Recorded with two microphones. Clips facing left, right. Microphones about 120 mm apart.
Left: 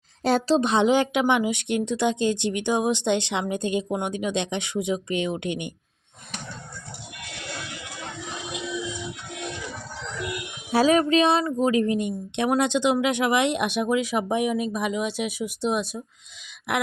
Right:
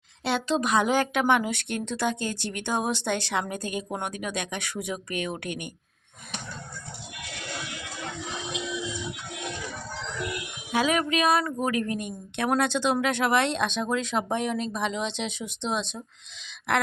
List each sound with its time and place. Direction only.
0.3 s a woman's voice: 35° left (ahead or behind); by 5.7 s 20° left (ahead or behind)
10.7 s a woman's voice: 35° left (ahead or behind); by 16.8 s 15° left (ahead or behind)